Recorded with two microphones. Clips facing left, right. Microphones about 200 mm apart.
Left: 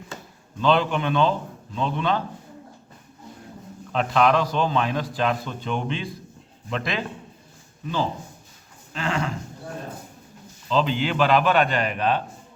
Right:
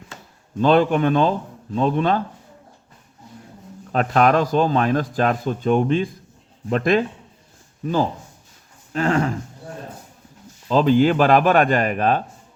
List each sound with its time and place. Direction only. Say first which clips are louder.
0.6 s a man's voice: right 5 dB; 50° right (ahead or behind)
3.9 s a man's voice: right 3 dB; 45° right (ahead or behind)
8.9 s speech: right 7 dB; 50° right (ahead or behind)
10.7 s a man's voice: right 8 dB; 45° right (ahead or behind)